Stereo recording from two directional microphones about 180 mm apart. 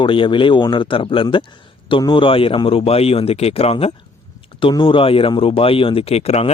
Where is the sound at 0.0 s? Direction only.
25° left (ahead or behind).